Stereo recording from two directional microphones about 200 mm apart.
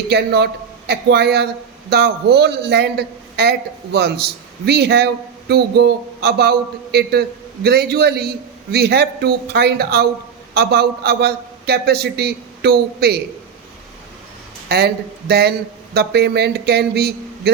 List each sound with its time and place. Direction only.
0.1 s a man's voice: 55° right (ahead or behind)
14.7 s a man's voice: 50° right (ahead or behind)